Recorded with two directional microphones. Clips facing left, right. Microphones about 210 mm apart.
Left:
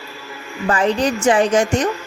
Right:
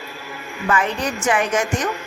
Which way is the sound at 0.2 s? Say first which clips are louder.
Even; 15° right (ahead or behind).